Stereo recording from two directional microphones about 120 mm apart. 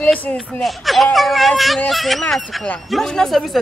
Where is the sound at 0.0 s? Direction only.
15° left (ahead or behind).